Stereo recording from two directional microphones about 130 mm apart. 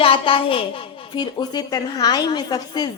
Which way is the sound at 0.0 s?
45° left (ahead or behind).